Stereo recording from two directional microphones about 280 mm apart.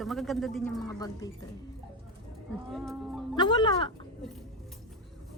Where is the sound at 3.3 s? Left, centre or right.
Centre.